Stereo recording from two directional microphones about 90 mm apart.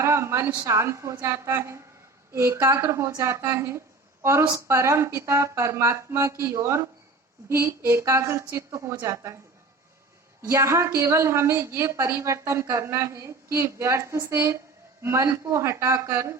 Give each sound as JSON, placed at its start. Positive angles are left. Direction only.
{"t": 0.0, "sound": "a sound", "side_deg": -30}
{"t": 0.6, "sound": "a woman's voice", "side_deg": -30}
{"t": 10.5, "sound": "a woman's voice", "side_deg": -30}